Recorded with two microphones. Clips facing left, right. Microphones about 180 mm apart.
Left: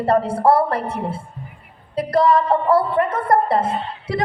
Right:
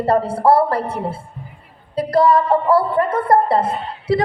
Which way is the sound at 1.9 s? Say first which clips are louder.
Right 1 dB; 30° right (ahead or behind).